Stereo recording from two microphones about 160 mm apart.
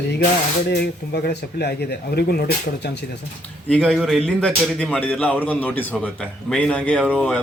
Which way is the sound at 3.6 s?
5° left (ahead or behind).